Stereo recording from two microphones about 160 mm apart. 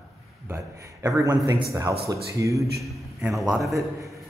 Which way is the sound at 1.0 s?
20° right (ahead or behind).